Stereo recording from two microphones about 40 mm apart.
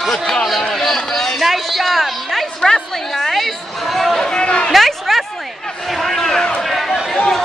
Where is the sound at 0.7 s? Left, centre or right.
Centre.